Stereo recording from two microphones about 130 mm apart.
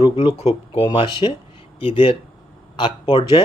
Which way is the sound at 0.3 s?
55° left (ahead or behind).